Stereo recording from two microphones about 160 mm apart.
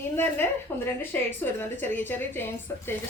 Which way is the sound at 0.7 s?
15° left (ahead or behind).